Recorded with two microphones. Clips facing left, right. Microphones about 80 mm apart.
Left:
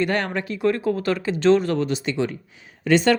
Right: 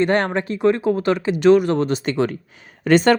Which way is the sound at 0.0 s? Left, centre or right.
Right.